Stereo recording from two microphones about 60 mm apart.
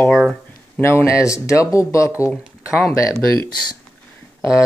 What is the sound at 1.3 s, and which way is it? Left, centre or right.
Speech, left.